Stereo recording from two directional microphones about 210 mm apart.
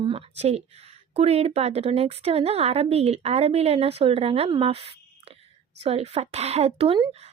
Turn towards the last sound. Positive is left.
turn(degrees=-25)  # may be behind; listen again after turning